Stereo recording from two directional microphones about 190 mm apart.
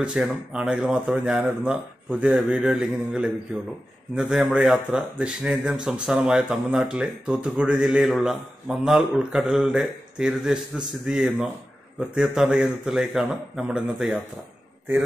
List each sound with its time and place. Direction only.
0.0 s a man's voice: 5° right (ahead or behind)